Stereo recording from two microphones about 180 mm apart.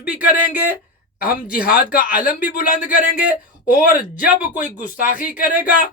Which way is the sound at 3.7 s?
50° left (ahead or behind).